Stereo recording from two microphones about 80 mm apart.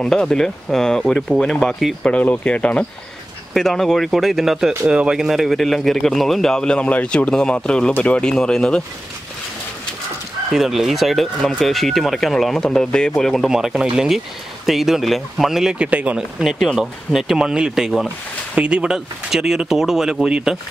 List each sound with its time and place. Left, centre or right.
0.0 s speech: centre
2.0 s speech: centre
3.5 s speech: centre
10.5 s speech: centre
13.5 s speech: centre
16.2 s speech: centre